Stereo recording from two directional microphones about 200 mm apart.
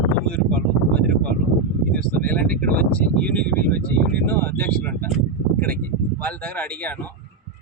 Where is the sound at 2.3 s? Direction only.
5° left (ahead or behind).